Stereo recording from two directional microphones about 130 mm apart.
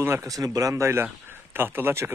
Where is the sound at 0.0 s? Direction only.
20° right (ahead or behind).